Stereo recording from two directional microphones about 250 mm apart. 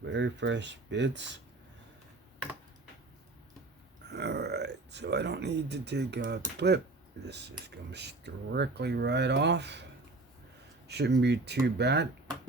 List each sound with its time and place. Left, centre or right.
0.0 s speech: right
4.1 s speech: right
10.8 s speech: right